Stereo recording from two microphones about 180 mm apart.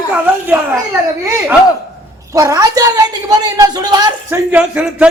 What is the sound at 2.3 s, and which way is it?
A man's voice, 20° right (ahead or behind).